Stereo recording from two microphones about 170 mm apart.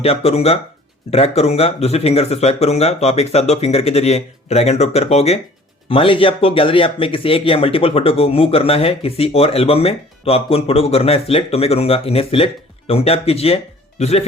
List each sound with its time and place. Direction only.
0.0 s speech: 35° left (ahead or behind)